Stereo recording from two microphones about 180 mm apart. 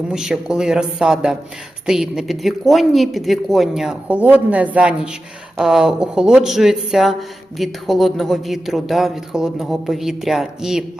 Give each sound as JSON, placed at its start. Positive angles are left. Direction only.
{"t": 0.1, "sound": "speech", "side_deg": -5}